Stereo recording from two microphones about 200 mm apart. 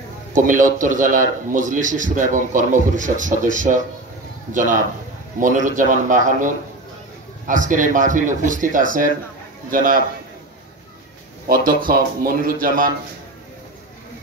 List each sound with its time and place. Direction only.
0.3 s a man's voice: 40° right (ahead or behind)
11.4 s speech: 45° right (ahead or behind)